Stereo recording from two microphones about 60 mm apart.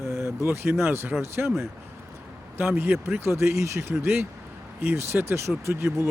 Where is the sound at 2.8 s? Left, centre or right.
Right.